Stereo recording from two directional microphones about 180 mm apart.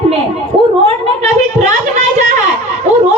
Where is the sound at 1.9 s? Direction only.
45° right (ahead or behind).